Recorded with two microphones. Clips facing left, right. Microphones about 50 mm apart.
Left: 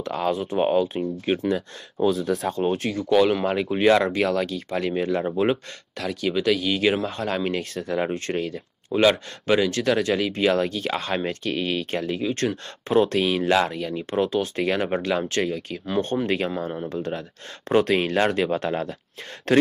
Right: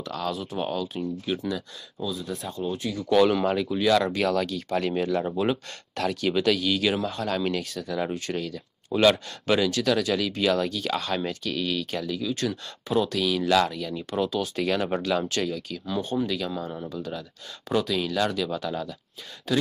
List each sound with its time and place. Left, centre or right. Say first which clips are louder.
0.1 s speech: left 6 dB; left
2.0 s speech: left 10 dB; left
3.1 s speech: left 1 dB; centre
3.7 s speech: left 6 dB; left
4.2 s speech: left 2 dB; centre
5.0 s speech: left 2 dB; left
5.9 s speech: even; centre
6.4 s speech: left 4 dB; centre
7.7 s speech: left 4 dB; left
15.9 s speech: left 4 dB; left
16.9 s speech: left 5 dB; left